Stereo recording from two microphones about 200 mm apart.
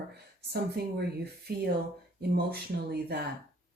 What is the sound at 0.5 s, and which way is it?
Speech, 55° right (ahead or behind).